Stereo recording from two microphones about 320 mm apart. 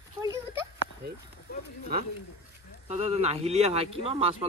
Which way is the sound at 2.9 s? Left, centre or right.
Centre.